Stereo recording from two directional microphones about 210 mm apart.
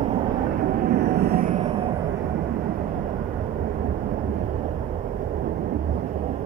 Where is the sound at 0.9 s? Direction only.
45° right (ahead or behind).